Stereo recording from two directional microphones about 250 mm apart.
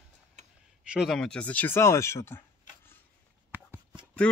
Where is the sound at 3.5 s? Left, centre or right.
Centre.